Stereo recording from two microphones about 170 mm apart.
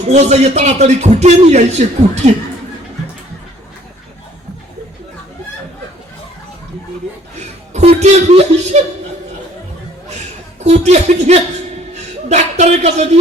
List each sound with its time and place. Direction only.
0.0 s a man's voice: 40° right (ahead or behind)
7.3 s chuckle: 40° right (ahead or behind)
10.1 s chuckle: 40° right (ahead or behind)
12.3 s a sound: 40° right (ahead or behind)